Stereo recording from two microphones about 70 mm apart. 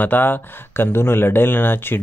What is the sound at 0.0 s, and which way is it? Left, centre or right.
Speech, left.